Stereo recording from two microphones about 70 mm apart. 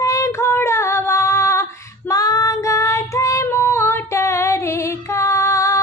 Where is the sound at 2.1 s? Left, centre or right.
Left.